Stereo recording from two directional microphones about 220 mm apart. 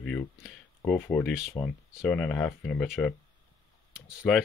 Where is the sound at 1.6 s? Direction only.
10° left (ahead or behind).